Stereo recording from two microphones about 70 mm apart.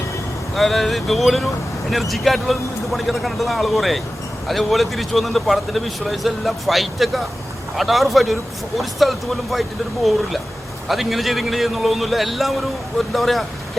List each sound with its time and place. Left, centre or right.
0.5 s speech: centre